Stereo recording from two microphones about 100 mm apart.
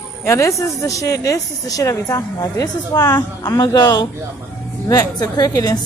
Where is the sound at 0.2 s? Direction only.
30° left (ahead or behind).